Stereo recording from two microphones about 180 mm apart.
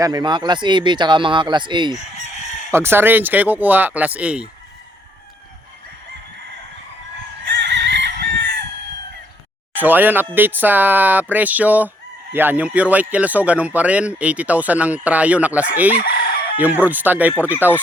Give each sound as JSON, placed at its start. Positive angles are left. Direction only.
{"t": 0.0, "sound": "speech", "side_deg": -25}
{"t": 2.7, "sound": "a man's voice", "side_deg": -10}
{"t": 7.5, "sound": "fowl", "side_deg": -80}
{"t": 9.7, "sound": "a man's voice", "side_deg": -10}